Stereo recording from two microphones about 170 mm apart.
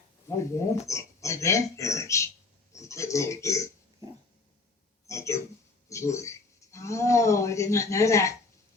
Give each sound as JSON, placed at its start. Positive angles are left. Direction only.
{"t": 0.3, "sound": "speech", "side_deg": 15}
{"t": 5.0, "sound": "speech", "side_deg": 15}